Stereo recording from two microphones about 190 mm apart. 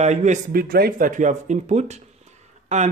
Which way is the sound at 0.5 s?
55° right (ahead or behind).